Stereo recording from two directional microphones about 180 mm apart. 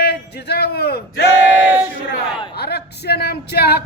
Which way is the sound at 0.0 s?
65° left (ahead or behind).